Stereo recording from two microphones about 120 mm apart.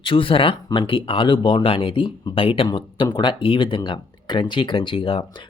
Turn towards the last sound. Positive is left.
turn(degrees=50)  # may be behind; listen again after turning